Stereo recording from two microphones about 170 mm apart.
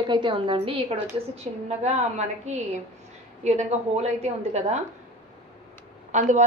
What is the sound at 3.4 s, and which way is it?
Speech, 40° right (ahead or behind).